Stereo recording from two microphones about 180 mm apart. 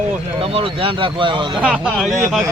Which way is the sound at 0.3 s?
30° right (ahead or behind).